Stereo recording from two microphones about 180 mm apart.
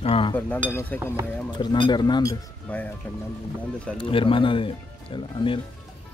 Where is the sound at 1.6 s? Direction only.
25° left (ahead or behind).